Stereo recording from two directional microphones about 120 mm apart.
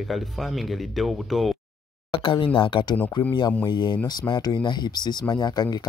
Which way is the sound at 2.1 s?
45° left (ahead or behind).